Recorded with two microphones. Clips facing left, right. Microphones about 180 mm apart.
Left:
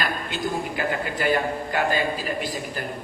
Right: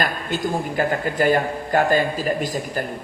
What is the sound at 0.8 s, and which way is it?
A man's voice, 45° right (ahead or behind).